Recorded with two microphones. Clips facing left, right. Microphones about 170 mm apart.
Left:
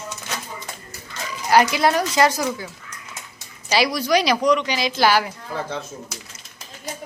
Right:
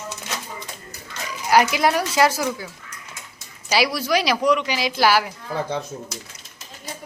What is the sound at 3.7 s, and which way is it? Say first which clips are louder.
Speech: left 1 dB; 5° right (ahead or behind).